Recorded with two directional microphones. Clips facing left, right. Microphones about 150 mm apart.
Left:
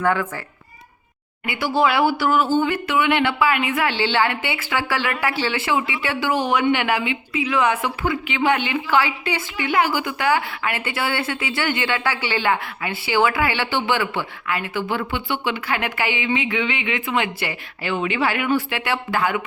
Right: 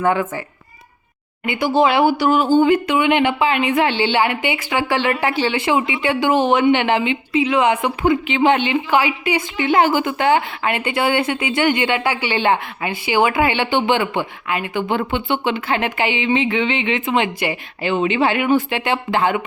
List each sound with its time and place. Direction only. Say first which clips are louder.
0.0 s a woman's voice: right 3 dB; 20° right (ahead or behind)
1.5 s a woman's voice: right 4 dB; 20° right (ahead or behind)
9.6 s a woman's voice: right 5 dB; 25° right (ahead or behind)